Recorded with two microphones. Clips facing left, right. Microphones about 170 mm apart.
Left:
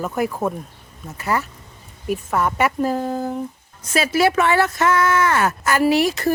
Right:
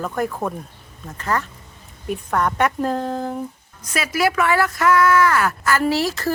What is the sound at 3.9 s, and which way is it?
Speech, 30° left (ahead or behind).